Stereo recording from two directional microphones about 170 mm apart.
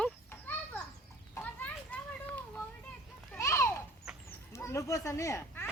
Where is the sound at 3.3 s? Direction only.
15° left (ahead or behind).